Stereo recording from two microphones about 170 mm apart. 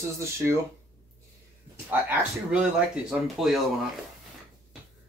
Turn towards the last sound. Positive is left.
turn(degrees=0)  # may be behind; listen again after turning